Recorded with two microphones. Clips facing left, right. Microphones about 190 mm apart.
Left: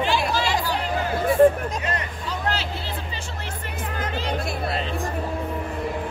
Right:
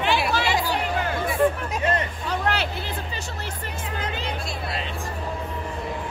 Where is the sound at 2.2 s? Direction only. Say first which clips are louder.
Right 1 dB; 60° right (ahead or behind).